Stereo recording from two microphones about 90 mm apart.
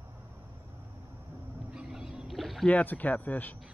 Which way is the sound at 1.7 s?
15° right (ahead or behind).